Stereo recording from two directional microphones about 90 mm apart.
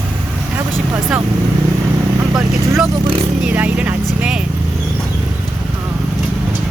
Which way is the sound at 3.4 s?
15° right (ahead or behind).